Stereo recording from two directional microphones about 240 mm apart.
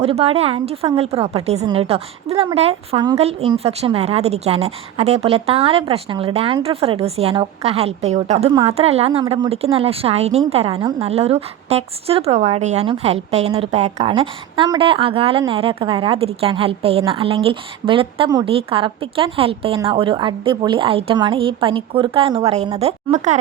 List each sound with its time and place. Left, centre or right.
0.0 s a woman's voice: right